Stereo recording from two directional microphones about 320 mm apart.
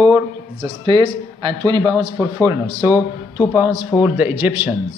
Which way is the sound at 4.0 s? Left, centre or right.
Centre.